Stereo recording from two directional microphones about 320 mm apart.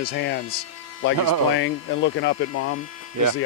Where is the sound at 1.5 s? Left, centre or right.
Left.